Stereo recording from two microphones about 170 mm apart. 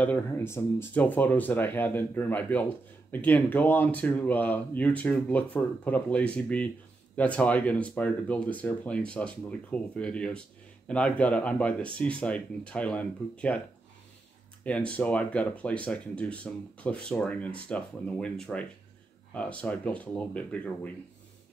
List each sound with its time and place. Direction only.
0.0 s speech: 10° left (ahead or behind)
14.6 s speech: 5° left (ahead or behind)